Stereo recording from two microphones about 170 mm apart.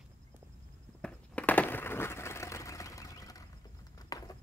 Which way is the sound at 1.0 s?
10° left (ahead or behind).